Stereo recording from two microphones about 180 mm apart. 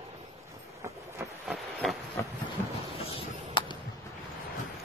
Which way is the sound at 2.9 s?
30° left (ahead or behind).